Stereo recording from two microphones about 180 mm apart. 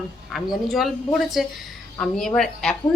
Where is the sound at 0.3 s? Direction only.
Centre (ahead or behind).